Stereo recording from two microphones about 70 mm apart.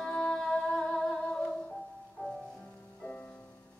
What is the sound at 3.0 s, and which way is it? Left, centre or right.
Music, centre.